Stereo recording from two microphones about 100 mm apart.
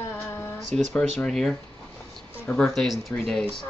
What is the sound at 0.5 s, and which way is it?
Speech, 5° left (ahead or behind).